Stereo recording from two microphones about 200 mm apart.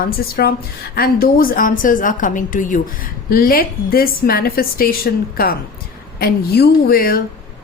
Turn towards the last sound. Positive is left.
turn(degrees=50)  # may be behind; listen again after turning